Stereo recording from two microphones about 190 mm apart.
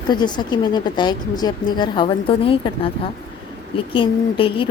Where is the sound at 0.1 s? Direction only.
25° left (ahead or behind).